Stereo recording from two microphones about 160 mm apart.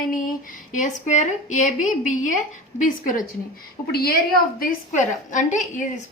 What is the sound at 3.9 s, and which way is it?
A woman's voice, 70° left (ahead or behind).